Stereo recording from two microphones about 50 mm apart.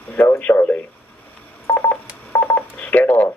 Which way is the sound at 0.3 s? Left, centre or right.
Left.